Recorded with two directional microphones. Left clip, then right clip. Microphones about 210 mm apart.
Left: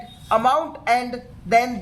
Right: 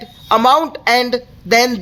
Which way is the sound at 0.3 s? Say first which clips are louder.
Right 7 dB; 55° right (ahead or behind).